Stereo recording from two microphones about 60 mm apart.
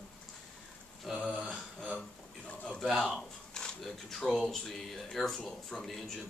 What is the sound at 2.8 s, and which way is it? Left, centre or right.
Speech, centre.